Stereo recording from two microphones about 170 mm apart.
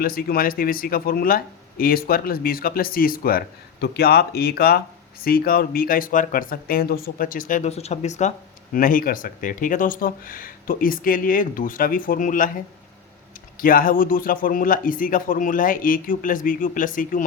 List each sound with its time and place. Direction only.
0.0 s speech: 65° left (ahead or behind); by 8.3 s 40° left (ahead or behind)
8.7 s speech: 55° left (ahead or behind)
13.6 s speech: 55° left (ahead or behind)